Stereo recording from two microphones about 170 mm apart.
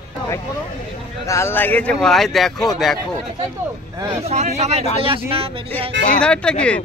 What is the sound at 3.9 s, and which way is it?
Speech, 15° right (ahead or behind).